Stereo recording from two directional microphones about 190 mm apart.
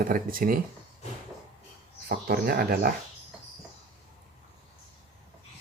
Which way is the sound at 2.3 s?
50° right (ahead or behind).